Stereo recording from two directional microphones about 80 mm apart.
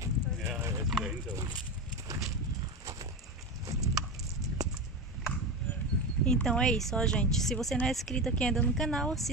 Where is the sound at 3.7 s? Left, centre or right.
Right.